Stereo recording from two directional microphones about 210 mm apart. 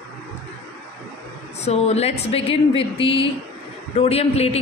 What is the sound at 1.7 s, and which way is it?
Speech, 30° left (ahead or behind).